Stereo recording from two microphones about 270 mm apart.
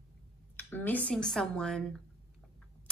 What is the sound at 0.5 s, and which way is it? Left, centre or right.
A woman's voice, centre.